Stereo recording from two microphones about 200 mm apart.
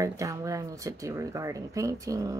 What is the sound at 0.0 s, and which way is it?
Speech, 15° right (ahead or behind).